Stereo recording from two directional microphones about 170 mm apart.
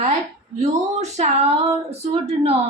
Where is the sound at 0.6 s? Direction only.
40° right (ahead or behind).